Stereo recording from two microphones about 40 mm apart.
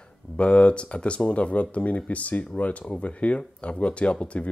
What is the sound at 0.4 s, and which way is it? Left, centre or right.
Speech, left.